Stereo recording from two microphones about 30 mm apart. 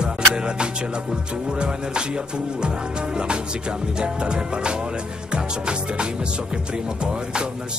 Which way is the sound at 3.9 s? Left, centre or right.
Right.